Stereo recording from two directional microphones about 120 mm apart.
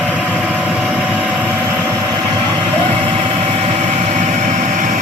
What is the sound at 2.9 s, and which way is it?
Vehicle, 45° right (ahead or behind).